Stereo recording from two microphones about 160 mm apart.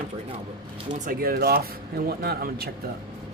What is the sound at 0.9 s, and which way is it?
Speech, 65° right (ahead or behind).